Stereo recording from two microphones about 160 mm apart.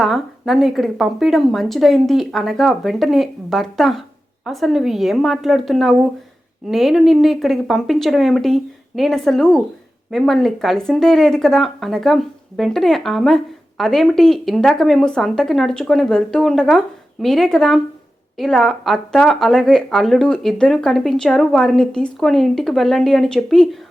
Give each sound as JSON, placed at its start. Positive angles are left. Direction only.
{"t": 0.0, "sound": "speech", "side_deg": 0}